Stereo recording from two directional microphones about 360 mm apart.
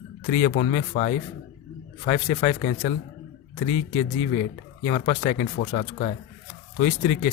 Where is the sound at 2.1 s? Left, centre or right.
Centre.